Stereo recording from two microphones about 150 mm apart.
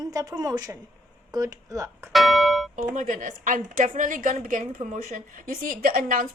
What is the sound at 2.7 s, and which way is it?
A woman's voice, 55° right (ahead or behind).